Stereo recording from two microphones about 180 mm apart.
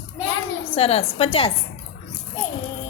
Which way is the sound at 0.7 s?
35° left (ahead or behind).